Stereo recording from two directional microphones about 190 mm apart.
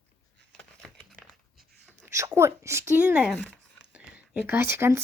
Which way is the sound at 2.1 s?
15° right (ahead or behind).